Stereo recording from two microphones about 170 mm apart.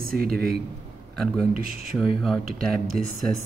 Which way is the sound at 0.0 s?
60° right (ahead or behind).